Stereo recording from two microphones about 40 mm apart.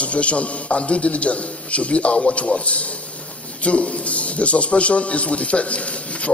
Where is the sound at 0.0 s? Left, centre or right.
Left.